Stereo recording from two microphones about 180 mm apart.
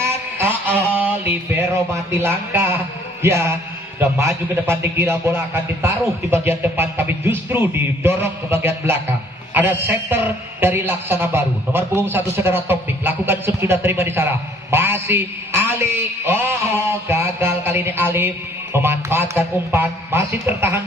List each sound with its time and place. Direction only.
0.4 s a sound: 10° right (ahead or behind)
3.2 s music: 15° right (ahead or behind)
4.0 s a man's voice: 15° right (ahead or behind)